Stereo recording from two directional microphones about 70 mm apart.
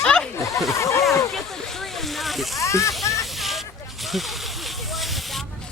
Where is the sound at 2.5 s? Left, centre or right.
Left.